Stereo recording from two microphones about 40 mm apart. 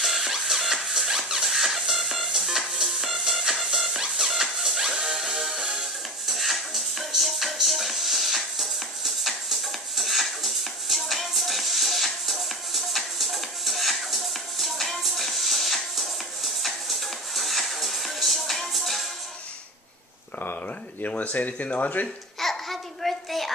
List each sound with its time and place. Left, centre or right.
0.0 s music: centre
21.0 s speech: left
22.4 s babbling: centre